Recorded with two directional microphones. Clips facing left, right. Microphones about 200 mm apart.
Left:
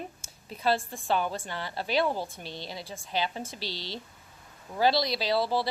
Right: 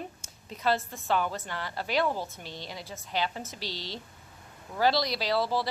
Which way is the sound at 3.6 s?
15° right (ahead or behind).